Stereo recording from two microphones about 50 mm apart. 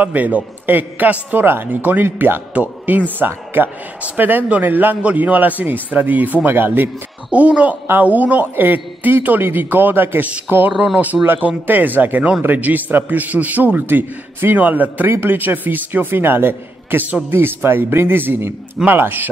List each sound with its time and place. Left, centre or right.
0.0 s a man's voice: right
2.0 s a man's voice: right
2.5 s speech: right
3.2 s a man's voice: right
6.5 s a man's voice: right
7.3 s a man's voice: right
10.7 s speech: centre
11.2 s a man's voice: right
15.0 s a man's voice: right